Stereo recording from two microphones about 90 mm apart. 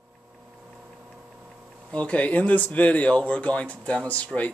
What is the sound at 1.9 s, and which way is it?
Speech, 15° left (ahead or behind).